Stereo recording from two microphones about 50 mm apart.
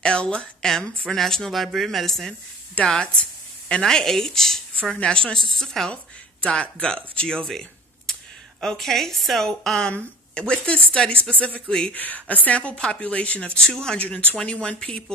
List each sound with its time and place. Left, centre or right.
0.0 s speech: left; by 2.3 s centre
2.9 s speech: centre
5.4 s speech: centre
6.4 s a woman's voice: left
11.6 s speech: centre
11.9 s speech: left; by 14.0 s centre
14.0 s speech: left